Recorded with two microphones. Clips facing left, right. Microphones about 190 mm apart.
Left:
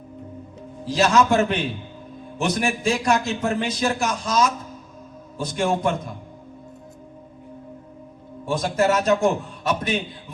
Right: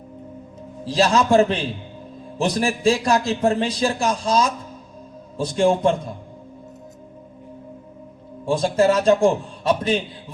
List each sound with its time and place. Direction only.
0.9 s a man's voice: 30° right (ahead or behind)
8.4 s a man's voice: 30° right (ahead or behind)